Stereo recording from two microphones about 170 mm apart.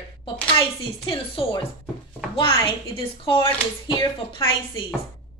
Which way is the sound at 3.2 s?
30° left (ahead or behind).